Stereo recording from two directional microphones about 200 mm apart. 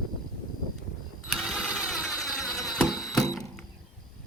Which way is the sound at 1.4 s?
5° right (ahead or behind).